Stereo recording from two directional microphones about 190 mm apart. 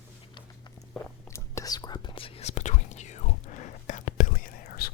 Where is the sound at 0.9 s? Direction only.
15° left (ahead or behind); by 4.9 s 50° left (ahead or behind).